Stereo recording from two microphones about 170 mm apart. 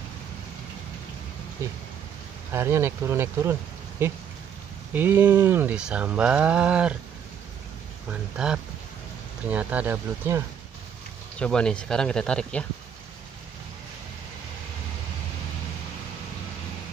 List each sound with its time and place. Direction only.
1.6 s speech: 15° right (ahead or behind)
8.1 s speech: 5° right (ahead or behind)
11.3 s speech: 5° left (ahead or behind)